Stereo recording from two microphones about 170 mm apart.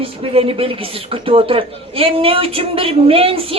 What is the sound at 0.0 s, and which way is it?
Speech, 35° right (ahead or behind).